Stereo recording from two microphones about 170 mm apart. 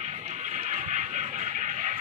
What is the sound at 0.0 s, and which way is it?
Music, 45° right (ahead or behind).